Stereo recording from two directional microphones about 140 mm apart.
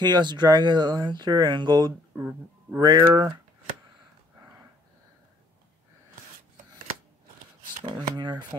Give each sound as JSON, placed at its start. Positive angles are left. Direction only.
{"t": 0.0, "sound": "speech", "side_deg": -30}
{"t": 2.1, "sound": "speech", "side_deg": -20}
{"t": 8.2, "sound": "speech", "side_deg": -30}